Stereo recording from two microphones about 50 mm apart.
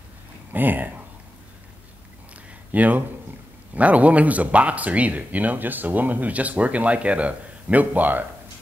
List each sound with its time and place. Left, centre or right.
0.5 s speech: right
2.7 s speech: right